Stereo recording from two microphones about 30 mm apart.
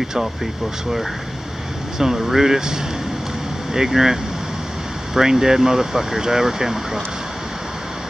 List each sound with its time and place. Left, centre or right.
2.0 s speech: centre